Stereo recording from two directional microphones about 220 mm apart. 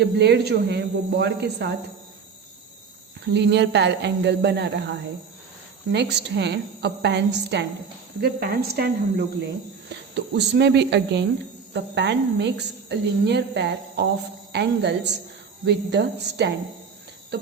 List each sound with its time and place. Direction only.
0.0 s a woman's voice: 50° right (ahead or behind)
3.2 s a woman's voice: 50° right (ahead or behind)